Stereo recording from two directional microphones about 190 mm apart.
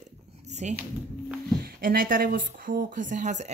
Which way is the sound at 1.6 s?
50° right (ahead or behind).